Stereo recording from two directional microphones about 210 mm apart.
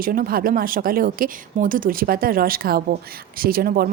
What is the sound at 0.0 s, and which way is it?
A woman's voice, 45° right (ahead or behind).